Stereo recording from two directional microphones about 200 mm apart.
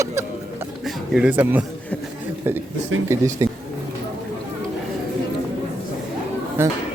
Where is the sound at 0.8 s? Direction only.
5° right (ahead or behind).